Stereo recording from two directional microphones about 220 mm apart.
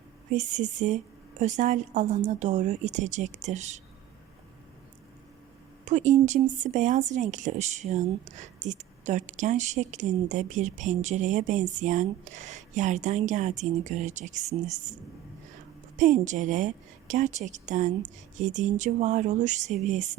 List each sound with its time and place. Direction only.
0.3 s speech: 35° right (ahead or behind)
5.8 s speech: 35° right (ahead or behind)
16.0 s speech: 35° right (ahead or behind)